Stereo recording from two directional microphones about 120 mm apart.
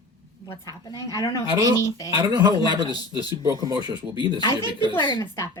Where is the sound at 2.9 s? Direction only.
35° left (ahead or behind).